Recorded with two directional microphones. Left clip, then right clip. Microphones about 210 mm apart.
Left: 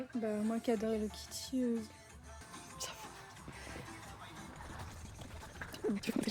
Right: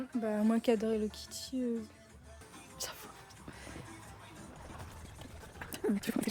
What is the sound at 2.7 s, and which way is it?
Music, 25° right (ahead or behind).